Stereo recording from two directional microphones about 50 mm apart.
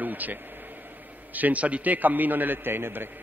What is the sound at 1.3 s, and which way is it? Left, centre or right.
A man's voice, right.